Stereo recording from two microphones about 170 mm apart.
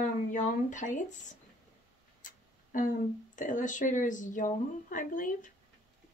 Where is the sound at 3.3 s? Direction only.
50° left (ahead or behind).